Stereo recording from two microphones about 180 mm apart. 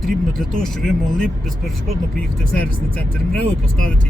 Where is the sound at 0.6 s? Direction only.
Centre (ahead or behind).